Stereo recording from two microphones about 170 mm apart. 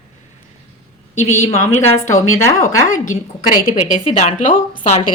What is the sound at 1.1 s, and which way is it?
Speech, 40° left (ahead or behind).